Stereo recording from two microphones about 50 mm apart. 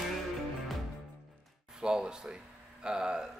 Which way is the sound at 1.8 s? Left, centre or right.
Centre.